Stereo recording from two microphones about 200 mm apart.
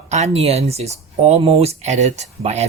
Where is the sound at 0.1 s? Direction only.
35° right (ahead or behind).